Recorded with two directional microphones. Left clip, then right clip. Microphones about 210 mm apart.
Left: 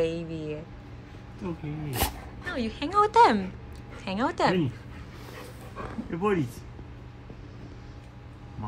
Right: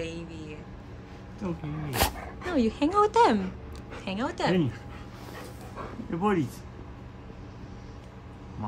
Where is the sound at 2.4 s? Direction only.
25° right (ahead or behind); by 4.5 s 5° right (ahead or behind).